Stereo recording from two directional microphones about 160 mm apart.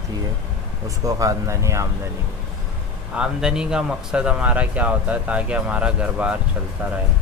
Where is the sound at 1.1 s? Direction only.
20° right (ahead or behind).